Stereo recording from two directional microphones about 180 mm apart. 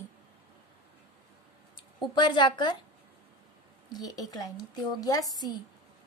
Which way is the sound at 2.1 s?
25° left (ahead or behind).